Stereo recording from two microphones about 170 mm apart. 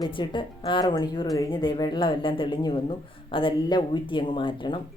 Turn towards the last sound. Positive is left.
turn(degrees=30)  # may be behind; listen again after turning